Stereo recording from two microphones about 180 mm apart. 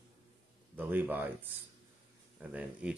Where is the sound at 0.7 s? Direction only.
10° right (ahead or behind).